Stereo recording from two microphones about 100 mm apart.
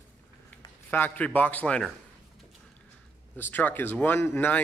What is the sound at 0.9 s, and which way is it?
Speech, 20° left (ahead or behind).